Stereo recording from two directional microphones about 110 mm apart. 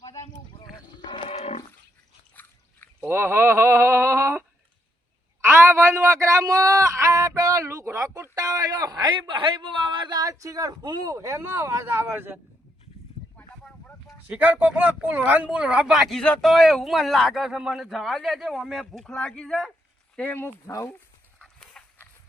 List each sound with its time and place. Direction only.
0.6 s roaring cats: 45° left (ahead or behind); by 1.6 s 70° left (ahead or behind)
2.3 s drip: 15° left (ahead or behind)
3.0 s a sound: 25° right (ahead or behind)
5.4 s a man's voice: 25° right (ahead or behind)
14.3 s speech: 15° right (ahead or behind); by 19.7 s 5° left (ahead or behind)
20.1 s speech: 15° left (ahead or behind)
21.3 s dog: 10° left (ahead or behind)